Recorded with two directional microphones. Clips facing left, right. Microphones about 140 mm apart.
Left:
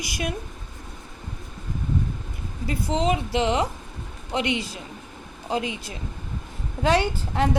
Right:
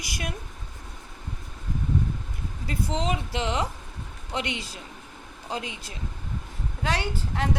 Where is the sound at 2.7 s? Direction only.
10° left (ahead or behind).